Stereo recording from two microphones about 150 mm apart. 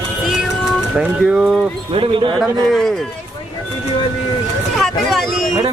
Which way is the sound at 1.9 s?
35° right (ahead or behind).